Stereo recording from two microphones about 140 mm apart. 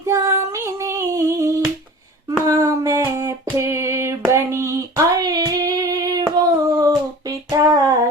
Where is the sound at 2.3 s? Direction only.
25° right (ahead or behind).